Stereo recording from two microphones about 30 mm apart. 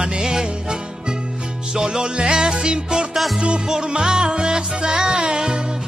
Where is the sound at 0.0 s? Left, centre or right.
Right.